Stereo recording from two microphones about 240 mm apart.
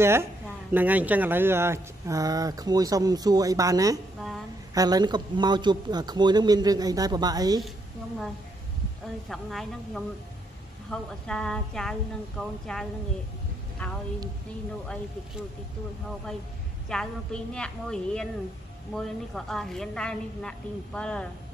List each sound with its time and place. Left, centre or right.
0.0 s speech: centre
9.3 s a woman's voice: centre
16.9 s a woman's voice: centre